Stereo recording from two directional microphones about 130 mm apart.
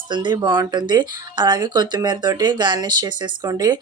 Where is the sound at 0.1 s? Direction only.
35° right (ahead or behind).